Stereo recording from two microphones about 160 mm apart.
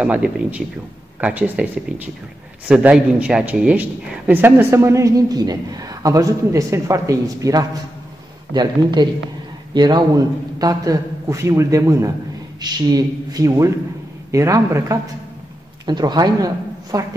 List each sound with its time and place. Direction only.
0.0 s a man's voice: 10° right (ahead or behind)
1.9 s speech: 50° right (ahead or behind)
2.7 s a man's voice: 5° right (ahead or behind); by 17.0 s 20° right (ahead or behind)